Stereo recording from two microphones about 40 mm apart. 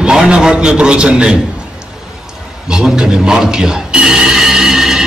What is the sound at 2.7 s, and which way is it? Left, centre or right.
Music, centre.